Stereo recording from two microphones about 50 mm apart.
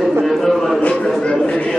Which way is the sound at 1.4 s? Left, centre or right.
Left.